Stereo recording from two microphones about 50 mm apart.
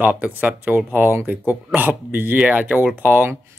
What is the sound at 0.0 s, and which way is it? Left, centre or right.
Speech, right.